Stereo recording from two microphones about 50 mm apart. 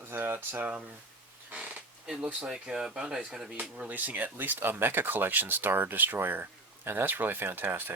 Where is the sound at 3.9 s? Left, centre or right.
Right.